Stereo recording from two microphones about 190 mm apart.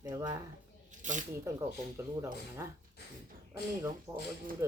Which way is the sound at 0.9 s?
40° right (ahead or behind).